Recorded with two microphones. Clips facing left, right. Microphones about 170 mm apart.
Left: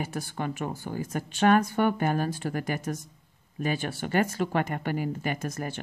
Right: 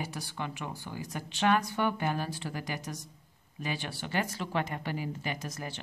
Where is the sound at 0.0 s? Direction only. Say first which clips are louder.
Left 5 dB; 50° left (ahead or behind).